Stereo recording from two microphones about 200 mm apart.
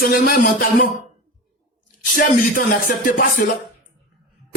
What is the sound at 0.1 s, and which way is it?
Music, 45° left (ahead or behind).